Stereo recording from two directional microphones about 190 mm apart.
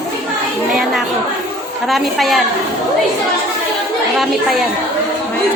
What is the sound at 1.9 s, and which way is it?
Speech, centre (ahead or behind).